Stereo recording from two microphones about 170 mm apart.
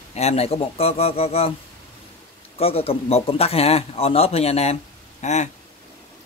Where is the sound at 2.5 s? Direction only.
35° left (ahead or behind).